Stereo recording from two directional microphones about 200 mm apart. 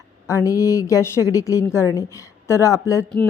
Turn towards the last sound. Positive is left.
turn(degrees=15)  # may be behind; listen again after turning